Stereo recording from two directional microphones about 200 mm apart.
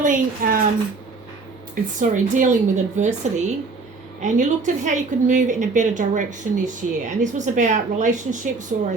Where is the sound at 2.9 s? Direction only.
35° right (ahead or behind).